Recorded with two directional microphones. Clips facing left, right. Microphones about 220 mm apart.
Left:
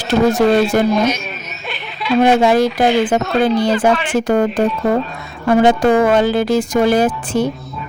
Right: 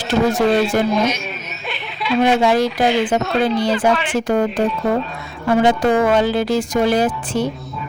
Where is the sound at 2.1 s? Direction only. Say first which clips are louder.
Left 3 dB; 50° left (ahead or behind).